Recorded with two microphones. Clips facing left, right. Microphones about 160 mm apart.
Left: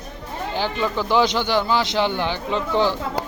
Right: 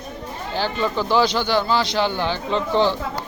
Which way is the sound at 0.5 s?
15° left (ahead or behind).